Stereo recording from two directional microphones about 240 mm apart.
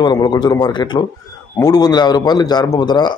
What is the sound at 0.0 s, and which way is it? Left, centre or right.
A man's voice, centre.